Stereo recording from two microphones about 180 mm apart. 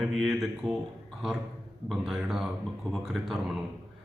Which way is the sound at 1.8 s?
Centre (ahead or behind).